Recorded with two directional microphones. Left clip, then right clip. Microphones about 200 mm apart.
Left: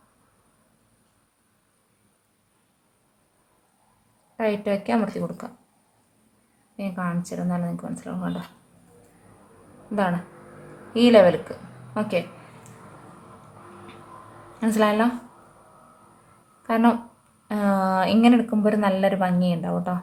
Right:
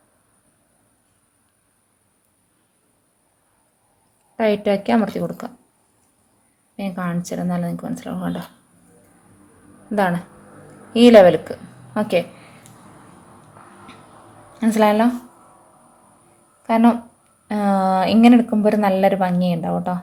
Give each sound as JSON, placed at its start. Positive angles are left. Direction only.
{"t": 4.4, "sound": "speech", "side_deg": -25}
{"t": 6.7, "sound": "speech", "side_deg": -25}
{"t": 9.9, "sound": "speech", "side_deg": -25}
{"t": 14.6, "sound": "speech", "side_deg": -20}
{"t": 16.6, "sound": "a woman's voice", "side_deg": -15}